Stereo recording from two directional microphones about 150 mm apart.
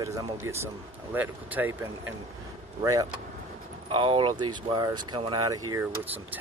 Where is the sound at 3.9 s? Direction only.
35° right (ahead or behind).